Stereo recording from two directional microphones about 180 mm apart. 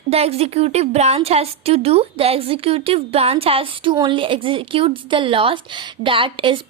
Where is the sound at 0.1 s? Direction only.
35° right (ahead or behind).